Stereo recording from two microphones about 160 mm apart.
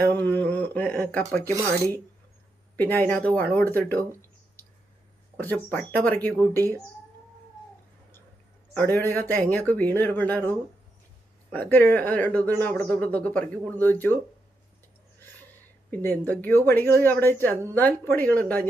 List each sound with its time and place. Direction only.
0.1 s a sound: 10° left (ahead or behind)
1.5 s speech: 20° right (ahead or behind)
2.7 s speech: 10° left (ahead or behind)
5.7 s speech: 10° left (ahead or behind)
8.7 s speech: 10° left (ahead or behind)
11.5 s speech: 10° left (ahead or behind)
15.9 s speech: 15° left (ahead or behind)